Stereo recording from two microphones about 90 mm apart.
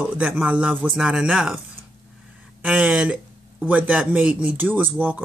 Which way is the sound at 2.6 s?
10° right (ahead or behind).